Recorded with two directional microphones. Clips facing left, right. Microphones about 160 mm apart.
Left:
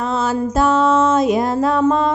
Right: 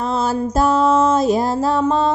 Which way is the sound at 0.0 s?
35° right (ahead or behind).